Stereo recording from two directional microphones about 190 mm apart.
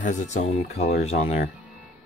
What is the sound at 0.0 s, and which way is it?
Speech, 40° left (ahead or behind).